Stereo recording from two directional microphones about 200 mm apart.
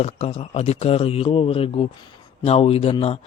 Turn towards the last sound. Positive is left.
turn(degrees=30)  # may be behind; listen again after turning